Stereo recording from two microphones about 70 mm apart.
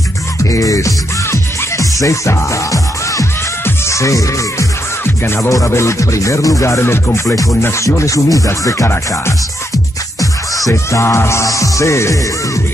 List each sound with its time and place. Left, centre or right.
0.4 s music: left
5.0 s music: left
5.5 s music: left
8.8 s music: left
10.7 s music: left